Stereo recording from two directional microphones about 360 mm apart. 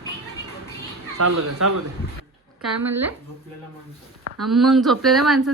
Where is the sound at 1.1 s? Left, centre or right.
Right.